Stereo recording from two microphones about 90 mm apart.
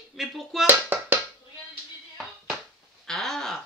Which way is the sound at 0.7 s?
20° right (ahead or behind).